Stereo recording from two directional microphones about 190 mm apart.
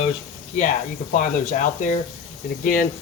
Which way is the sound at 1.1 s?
40° left (ahead or behind).